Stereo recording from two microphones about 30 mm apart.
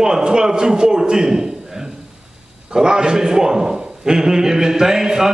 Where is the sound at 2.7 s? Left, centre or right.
Right.